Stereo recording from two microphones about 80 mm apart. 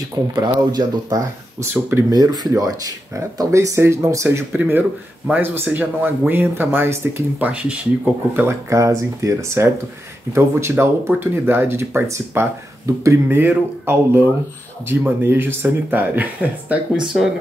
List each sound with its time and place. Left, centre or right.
0.3 s speech: right
1.6 s speech: right
2.0 s speech: right
4.6 s speech: right
7.3 s speech: centre
8.5 s speech: right
13.3 s speech: right